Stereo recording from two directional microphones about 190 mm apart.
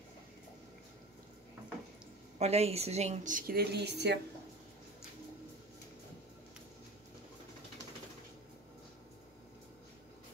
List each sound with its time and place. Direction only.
2.3 s a woman's voice: 35° right (ahead or behind); by 4.2 s 60° right (ahead or behind)